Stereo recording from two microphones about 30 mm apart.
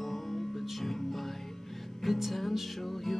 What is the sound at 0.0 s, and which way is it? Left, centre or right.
Music, centre.